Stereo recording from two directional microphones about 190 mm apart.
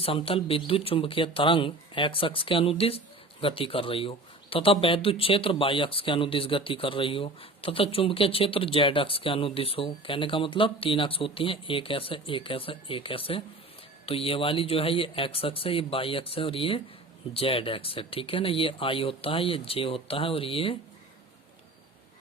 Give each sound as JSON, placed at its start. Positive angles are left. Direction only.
{"t": 0.0, "sound": "speech", "side_deg": 30}